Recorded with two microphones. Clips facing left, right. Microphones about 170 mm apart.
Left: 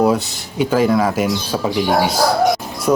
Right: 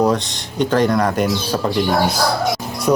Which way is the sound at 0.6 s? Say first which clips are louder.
Left 1 dB; 5° left (ahead or behind).